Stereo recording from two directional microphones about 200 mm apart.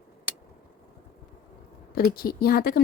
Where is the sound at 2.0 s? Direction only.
50° left (ahead or behind).